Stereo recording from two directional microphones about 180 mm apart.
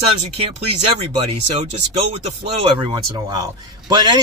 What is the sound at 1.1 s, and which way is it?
A man's voice, 35° right (ahead or behind).